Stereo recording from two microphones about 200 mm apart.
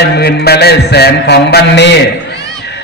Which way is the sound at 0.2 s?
55° left (ahead or behind).